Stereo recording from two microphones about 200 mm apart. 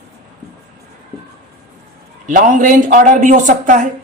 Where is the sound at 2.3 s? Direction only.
40° right (ahead or behind).